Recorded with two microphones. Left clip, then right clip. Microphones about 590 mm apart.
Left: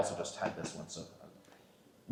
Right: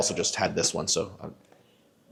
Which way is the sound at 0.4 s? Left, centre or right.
Right.